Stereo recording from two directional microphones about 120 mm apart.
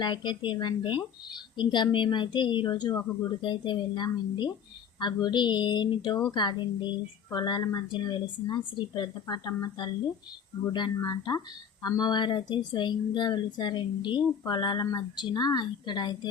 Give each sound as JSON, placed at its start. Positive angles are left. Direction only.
{"t": 0.0, "sound": "speech", "side_deg": 40}
{"t": 10.7, "sound": "speech", "side_deg": 40}